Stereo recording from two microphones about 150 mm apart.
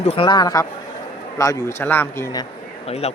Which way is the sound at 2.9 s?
45° left (ahead or behind).